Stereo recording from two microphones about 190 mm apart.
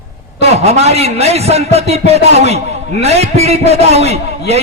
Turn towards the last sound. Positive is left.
turn(degrees=-35)  # may be behind; listen again after turning